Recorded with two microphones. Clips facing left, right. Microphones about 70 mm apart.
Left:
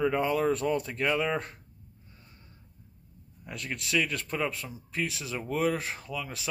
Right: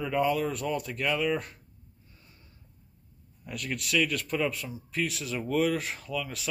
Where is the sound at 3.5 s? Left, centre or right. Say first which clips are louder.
Right 1 dB; left.